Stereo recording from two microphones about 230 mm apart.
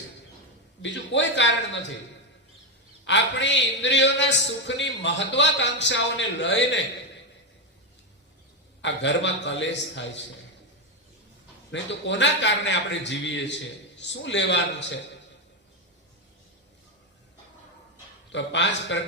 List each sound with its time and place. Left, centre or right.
0.8 s a man's voice: left
3.0 s a man's voice: left
8.8 s a man's voice: left
11.7 s a man's voice: left
18.3 s a man's voice: left